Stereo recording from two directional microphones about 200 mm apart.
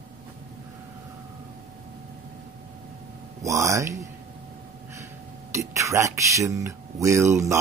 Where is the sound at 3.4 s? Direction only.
15° right (ahead or behind).